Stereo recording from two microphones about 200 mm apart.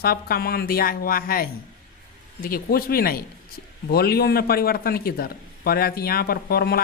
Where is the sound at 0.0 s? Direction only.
50° left (ahead or behind).